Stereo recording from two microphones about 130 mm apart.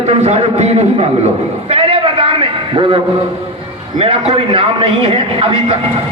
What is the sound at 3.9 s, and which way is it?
A man's voice, 45° right (ahead or behind).